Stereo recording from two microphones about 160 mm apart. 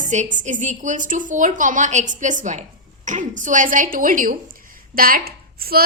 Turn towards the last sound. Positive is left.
turn(degrees=-70)  # may be behind; listen again after turning